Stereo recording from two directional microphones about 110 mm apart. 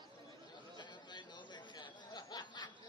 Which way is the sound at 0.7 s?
45° left (ahead or behind).